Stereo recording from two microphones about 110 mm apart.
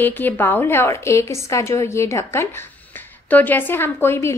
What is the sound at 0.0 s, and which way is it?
A woman's voice, 20° left (ahead or behind).